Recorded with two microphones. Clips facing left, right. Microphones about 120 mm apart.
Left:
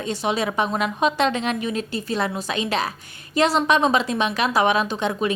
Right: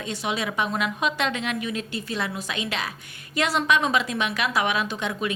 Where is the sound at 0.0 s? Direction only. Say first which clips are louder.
Left 5 dB; 35° left (ahead or behind).